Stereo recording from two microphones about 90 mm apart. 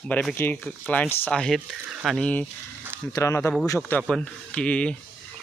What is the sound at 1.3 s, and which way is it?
Speech, 5° left (ahead or behind).